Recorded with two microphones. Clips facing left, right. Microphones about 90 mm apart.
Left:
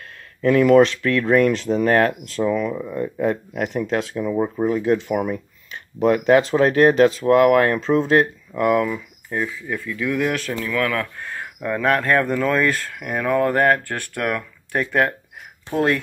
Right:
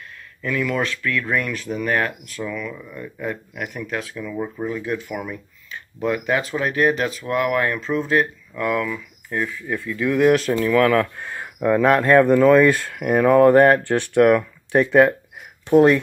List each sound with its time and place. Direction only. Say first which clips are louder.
0.4 s speech: left 9 dB; 40° left (ahead or behind)
0.7 s speech: left 9 dB; 30° left (ahead or behind)
6.4 s speech: left 5 dB; 35° left (ahead or behind)
7.4 s speech: left 3 dB; 45° left (ahead or behind)
7.7 s speech: left 4 dB; 30° left (ahead or behind)
8.5 s speech: left 4 dB; 40° left (ahead or behind)
8.8 s speech: left 3 dB; 20° left (ahead or behind)
9.4 s speech: even; 10° left (ahead or behind)
9.7 s speech: right 2 dB; 5° right (ahead or behind)